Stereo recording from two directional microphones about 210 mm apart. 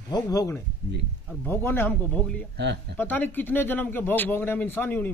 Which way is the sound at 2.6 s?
55° right (ahead or behind).